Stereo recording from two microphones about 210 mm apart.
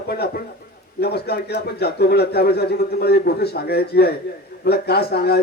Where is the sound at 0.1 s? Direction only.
45° left (ahead or behind).